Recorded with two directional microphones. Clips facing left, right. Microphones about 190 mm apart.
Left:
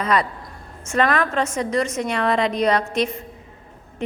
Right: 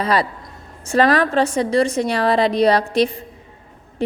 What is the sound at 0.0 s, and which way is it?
A woman's voice, 35° right (ahead or behind).